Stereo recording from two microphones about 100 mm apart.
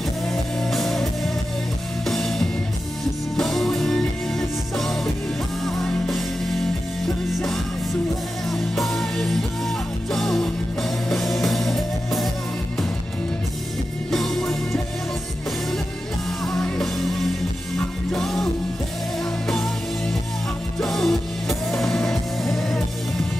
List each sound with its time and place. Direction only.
0.6 s music: centre (ahead or behind)
7.3 s music: centre (ahead or behind)
14.1 s music: 5° left (ahead or behind)
16.4 s music: 5° left (ahead or behind)
20.8 s music: centre (ahead or behind)